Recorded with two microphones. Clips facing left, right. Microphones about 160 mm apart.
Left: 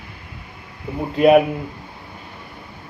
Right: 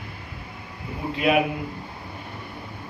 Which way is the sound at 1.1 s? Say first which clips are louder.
Left 9 dB; 45° left (ahead or behind).